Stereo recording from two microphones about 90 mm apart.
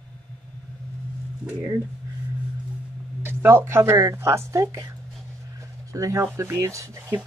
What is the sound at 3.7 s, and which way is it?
Speech, 30° right (ahead or behind).